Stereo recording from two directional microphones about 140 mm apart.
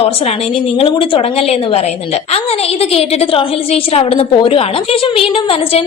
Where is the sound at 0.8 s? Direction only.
40° left (ahead or behind).